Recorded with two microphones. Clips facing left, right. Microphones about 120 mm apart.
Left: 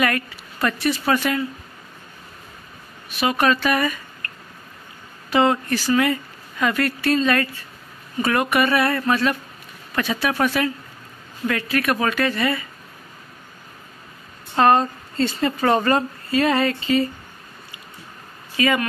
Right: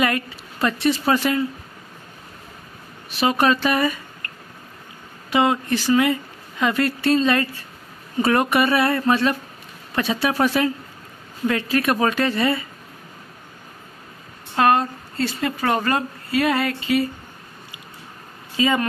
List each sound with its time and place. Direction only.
0.0 s speech: 20° right (ahead or behind)
3.2 s speech: 30° right (ahead or behind)
5.3 s speech: 15° right (ahead or behind)
14.5 s a woman's voice: 5° right (ahead or behind)
18.6 s speech: 25° right (ahead or behind)